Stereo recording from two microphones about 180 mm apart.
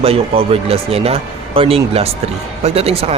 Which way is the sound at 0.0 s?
35° right (ahead or behind).